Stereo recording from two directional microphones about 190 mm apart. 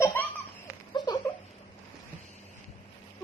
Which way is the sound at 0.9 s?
25° left (ahead or behind).